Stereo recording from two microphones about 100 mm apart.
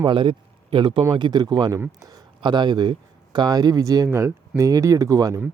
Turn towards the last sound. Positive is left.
turn(degrees=-35)  # may be behind; listen again after turning